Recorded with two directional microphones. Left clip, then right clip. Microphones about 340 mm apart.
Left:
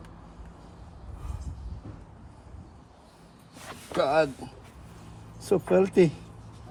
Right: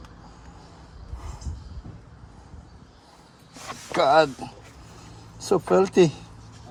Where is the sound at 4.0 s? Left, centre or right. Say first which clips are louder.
Right 6 dB; right.